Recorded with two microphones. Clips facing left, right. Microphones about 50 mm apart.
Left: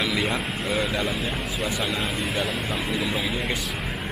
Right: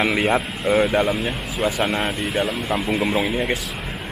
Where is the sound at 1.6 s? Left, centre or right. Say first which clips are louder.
Right 8 dB; right.